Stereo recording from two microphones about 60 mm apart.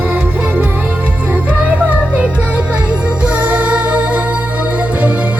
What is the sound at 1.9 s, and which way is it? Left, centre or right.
Music, right.